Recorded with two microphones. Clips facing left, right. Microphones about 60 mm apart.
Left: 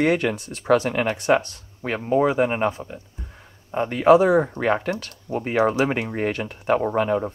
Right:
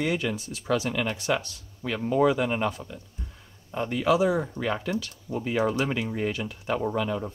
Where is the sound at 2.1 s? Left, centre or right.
Left.